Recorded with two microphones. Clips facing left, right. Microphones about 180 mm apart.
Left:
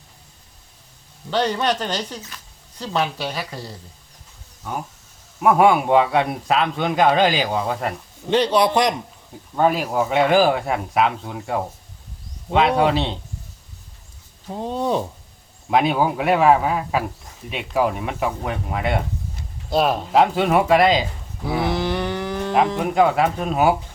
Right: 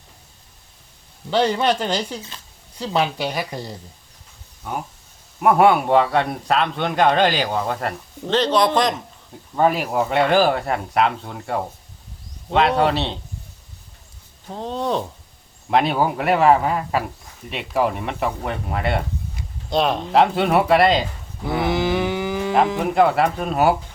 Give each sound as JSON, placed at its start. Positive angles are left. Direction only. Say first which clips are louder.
{"t": 1.3, "sound": "speech", "louder": "right 2 dB", "side_deg": -10}
{"t": 5.4, "sound": "a man's voice", "louder": "even", "side_deg": 0}
{"t": 9.6, "sound": "a man's voice", "louder": "even", "side_deg": 0}
{"t": 14.5, "sound": "a man's voice", "louder": "left 1 dB", "side_deg": 10}